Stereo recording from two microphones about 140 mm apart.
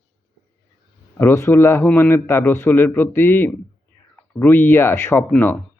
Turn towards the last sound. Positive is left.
turn(degrees=15)  # may be behind; listen again after turning